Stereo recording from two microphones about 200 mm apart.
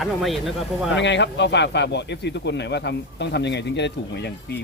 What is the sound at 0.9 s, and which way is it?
Speech, 65° left (ahead or behind).